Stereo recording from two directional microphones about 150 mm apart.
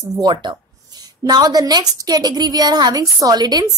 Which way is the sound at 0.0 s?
30° right (ahead or behind).